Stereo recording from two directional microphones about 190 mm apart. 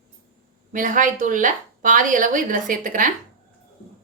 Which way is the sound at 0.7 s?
40° right (ahead or behind).